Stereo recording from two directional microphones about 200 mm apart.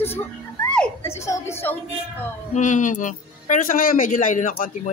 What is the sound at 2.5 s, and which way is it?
Speech, 40° left (ahead or behind).